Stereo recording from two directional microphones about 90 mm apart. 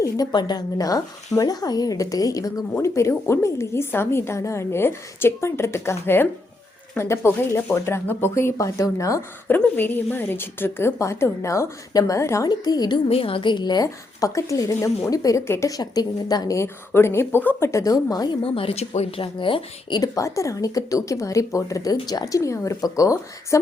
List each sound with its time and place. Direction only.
0.0 s a woman's voice: 45° left (ahead or behind)
9.5 s a woman's voice: 20° left (ahead or behind)
12.5 s a woman's voice: 50° left (ahead or behind)
13.1 s a woman's voice: 90° left; by 13.8 s 55° left (ahead or behind)
13.8 s speech: 35° left (ahead or behind)
15.7 s a woman's voice: 45° left (ahead or behind)
16.6 s a woman's voice: 25° left (ahead or behind)
17.7 s a woman's voice: 35° left (ahead or behind)
18.4 s speech: 90° left
19.1 s speech: 75° left (ahead or behind)
20.0 s speech: 35° left (ahead or behind)